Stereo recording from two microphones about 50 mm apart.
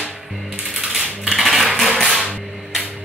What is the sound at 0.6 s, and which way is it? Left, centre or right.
Typewriter, centre.